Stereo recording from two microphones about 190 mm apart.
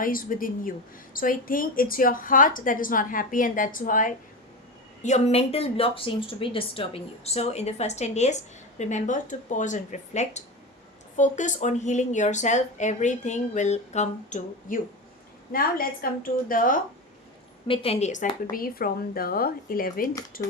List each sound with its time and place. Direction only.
0.0 s a woman's voice: 45° left (ahead or behind)
17.7 s a woman's voice: 35° left (ahead or behind)
18.5 s a woman's voice: 50° left (ahead or behind)